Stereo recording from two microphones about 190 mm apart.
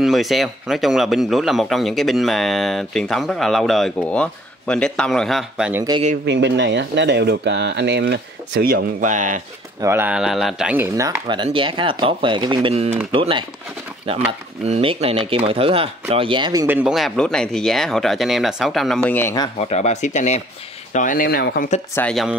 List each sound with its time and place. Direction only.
0.0 s a man's voice: centre (ahead or behind)
6.2 s speech: 65° right (ahead or behind); by 9.4 s 40° right (ahead or behind)
9.8 s speech: 15° right (ahead or behind)
14.6 s speech: 30° right (ahead or behind)
16.6 s a man's voice: 5° right (ahead or behind)
19.0 s speech: 10° left (ahead or behind)
19.6 s speech: 35° left (ahead or behind)
21.9 s a man's voice: 5° left (ahead or behind)